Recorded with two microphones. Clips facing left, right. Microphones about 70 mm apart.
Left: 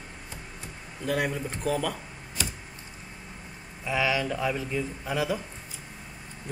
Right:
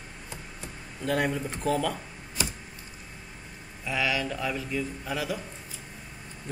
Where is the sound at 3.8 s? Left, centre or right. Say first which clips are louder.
Left 2 dB; centre.